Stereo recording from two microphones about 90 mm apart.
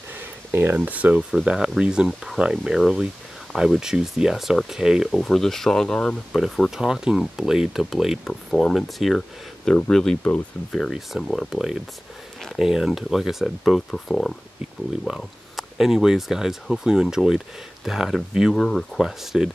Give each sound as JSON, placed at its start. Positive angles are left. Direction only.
{"t": 0.2, "sound": "speech", "side_deg": -20}